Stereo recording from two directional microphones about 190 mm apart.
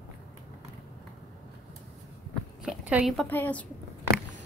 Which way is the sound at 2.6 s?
5° right (ahead or behind).